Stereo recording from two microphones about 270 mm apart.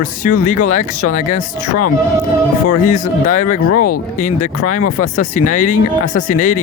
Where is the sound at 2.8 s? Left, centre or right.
Left.